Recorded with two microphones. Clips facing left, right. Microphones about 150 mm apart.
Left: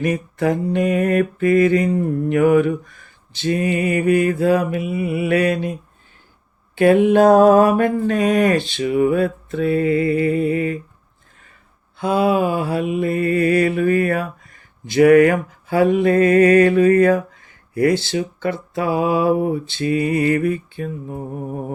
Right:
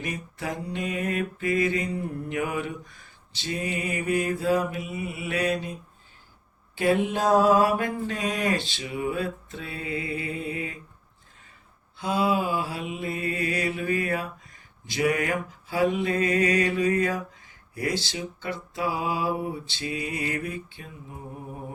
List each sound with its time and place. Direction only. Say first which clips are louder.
0.0 s mantra: left 13 dB; 60° left (ahead or behind)
6.7 s mantra: left 11 dB; 60° left (ahead or behind)
11.9 s mantra: left 8 dB; 55° left (ahead or behind)